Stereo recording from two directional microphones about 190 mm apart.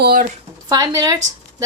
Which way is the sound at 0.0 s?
50° right (ahead or behind).